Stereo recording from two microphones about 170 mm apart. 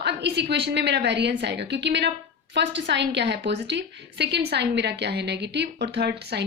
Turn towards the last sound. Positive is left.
turn(degrees=-75)  # may be behind; listen again after turning